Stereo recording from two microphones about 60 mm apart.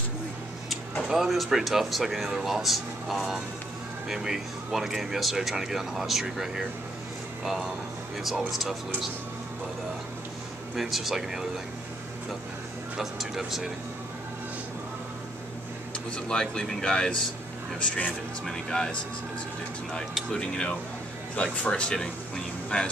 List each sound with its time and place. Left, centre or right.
1.0 s speech: centre
10.8 s speech: centre
12.9 s speech: centre
16.3 s speech: centre
18.7 s speech: centre
20.2 s speech: centre